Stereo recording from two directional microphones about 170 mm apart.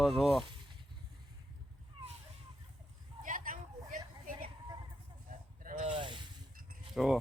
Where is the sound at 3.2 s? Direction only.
50° right (ahead or behind).